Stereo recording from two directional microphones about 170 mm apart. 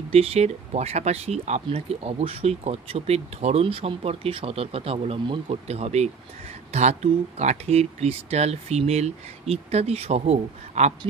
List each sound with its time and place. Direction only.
0.1 s speech: 35° right (ahead or behind)